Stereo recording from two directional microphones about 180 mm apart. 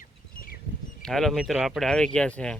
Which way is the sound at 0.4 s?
55° left (ahead or behind).